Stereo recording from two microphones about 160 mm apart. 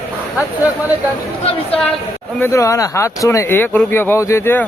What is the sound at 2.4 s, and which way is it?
Speech, 20° left (ahead or behind).